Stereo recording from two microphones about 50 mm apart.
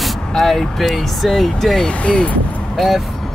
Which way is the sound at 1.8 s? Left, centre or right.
Centre.